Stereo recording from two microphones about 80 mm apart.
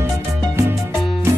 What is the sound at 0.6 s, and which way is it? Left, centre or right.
Music, right.